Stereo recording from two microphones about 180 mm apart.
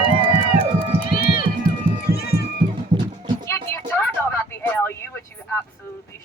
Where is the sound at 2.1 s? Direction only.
60° left (ahead or behind).